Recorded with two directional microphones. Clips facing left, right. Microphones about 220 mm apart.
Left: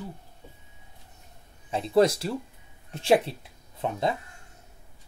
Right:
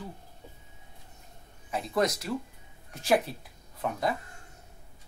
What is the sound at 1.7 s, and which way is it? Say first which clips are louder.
Speech: left 7 dB; 30° left (ahead or behind).